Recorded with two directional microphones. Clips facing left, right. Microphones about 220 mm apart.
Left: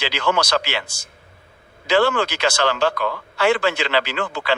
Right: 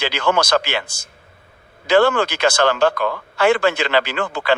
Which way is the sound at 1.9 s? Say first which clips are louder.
Right 3 dB; 55° right (ahead or behind).